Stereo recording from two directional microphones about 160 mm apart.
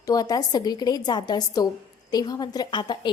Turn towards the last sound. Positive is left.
turn(degrees=30)  # may be behind; listen again after turning